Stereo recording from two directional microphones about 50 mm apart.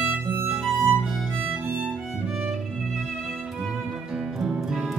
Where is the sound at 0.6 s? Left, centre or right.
Centre.